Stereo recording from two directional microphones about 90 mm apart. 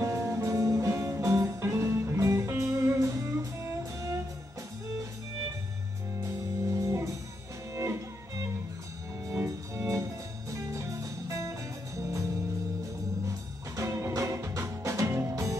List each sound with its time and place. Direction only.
0.0 s music: 35° right (ahead or behind)
6.2 s music: 35° right (ahead or behind)
13.7 s music: 35° right (ahead or behind)